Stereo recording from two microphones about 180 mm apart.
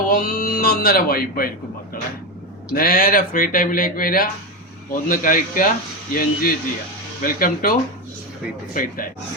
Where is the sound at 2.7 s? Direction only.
55° left (ahead or behind).